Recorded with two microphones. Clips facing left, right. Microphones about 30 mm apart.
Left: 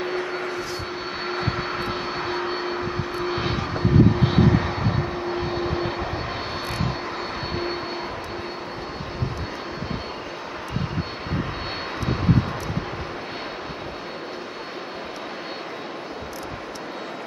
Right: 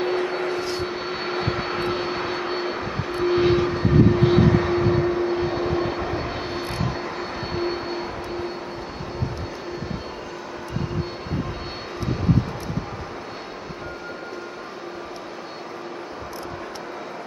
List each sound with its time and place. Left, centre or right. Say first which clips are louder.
0.0 s vehicle: right 3 dB; centre
0.6 s vehicle: right 3 dB; right
1.2 s vehicle: even; centre